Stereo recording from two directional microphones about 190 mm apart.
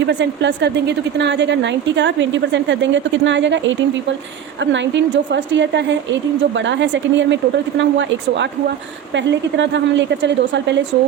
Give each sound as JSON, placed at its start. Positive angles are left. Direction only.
{"t": 0.1, "sound": "a woman's voice", "side_deg": -65}